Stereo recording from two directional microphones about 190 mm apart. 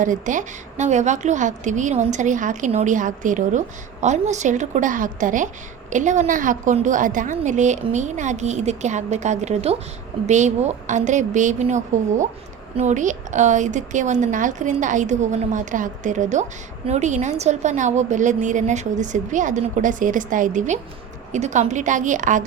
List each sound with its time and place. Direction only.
0.0 s a woman's voice: 40° right (ahead or behind)